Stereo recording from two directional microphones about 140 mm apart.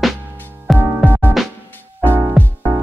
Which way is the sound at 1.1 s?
15° left (ahead or behind).